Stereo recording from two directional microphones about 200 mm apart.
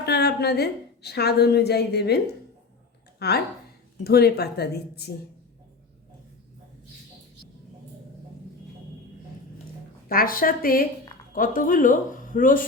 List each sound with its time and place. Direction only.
0.0 s a woman's voice: 55° left (ahead or behind)
10.1 s speech: 45° left (ahead or behind)